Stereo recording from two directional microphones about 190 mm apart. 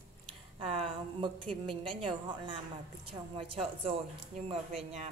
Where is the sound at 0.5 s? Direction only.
25° right (ahead or behind).